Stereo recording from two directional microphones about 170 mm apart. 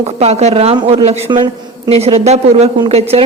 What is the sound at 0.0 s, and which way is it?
A woman's voice, 40° right (ahead or behind).